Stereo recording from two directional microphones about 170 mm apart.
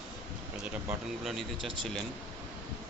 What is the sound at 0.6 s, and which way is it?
Speech, 5° right (ahead or behind).